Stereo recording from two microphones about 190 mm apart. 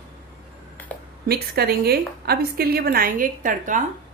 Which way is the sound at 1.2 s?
55° right (ahead or behind).